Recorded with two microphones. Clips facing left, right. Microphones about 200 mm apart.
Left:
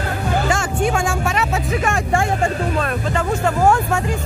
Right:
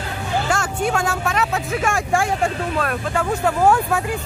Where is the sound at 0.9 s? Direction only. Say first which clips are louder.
Left 1 dB; 10° left (ahead or behind).